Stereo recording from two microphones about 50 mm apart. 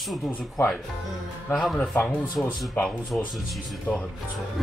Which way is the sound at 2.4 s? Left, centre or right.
Centre.